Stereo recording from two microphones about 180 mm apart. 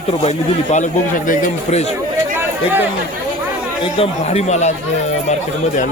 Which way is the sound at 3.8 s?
35° left (ahead or behind).